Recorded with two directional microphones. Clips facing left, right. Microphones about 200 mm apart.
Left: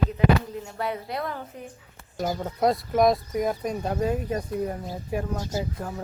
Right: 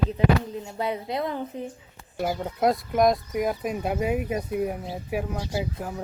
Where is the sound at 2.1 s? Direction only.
5° right (ahead or behind).